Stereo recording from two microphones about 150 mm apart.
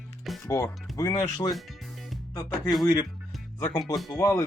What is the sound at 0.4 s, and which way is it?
Speech, 20° left (ahead or behind).